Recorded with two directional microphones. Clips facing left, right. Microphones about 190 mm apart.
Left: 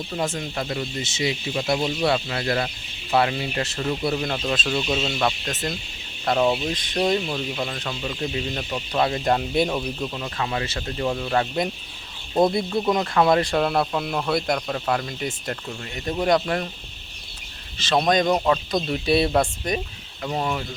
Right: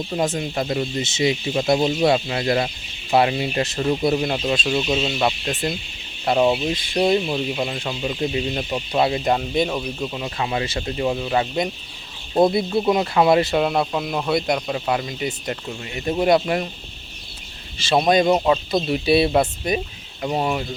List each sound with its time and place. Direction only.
0.1 s speech: 20° right (ahead or behind); by 10.1 s centre (ahead or behind)
10.1 s speech: 15° right (ahead or behind)
17.7 s speech: 10° right (ahead or behind)
20.2 s speech: 15° right (ahead or behind)